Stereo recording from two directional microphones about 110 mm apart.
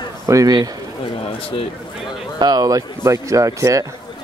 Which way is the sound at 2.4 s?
40° right (ahead or behind).